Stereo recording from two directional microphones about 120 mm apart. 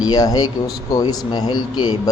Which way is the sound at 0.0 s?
35° left (ahead or behind).